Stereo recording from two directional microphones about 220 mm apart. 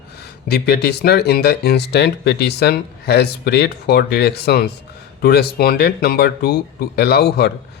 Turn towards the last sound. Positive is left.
turn(degrees=45)  # may be behind; listen again after turning